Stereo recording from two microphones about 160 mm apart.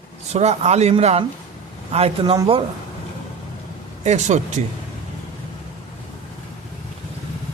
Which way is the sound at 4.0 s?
45° right (ahead or behind).